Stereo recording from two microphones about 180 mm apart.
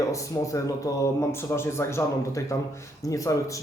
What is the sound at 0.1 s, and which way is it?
A man's voice, 20° left (ahead or behind).